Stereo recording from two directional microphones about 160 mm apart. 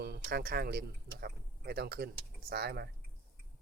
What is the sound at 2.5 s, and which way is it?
Speech, 80° right.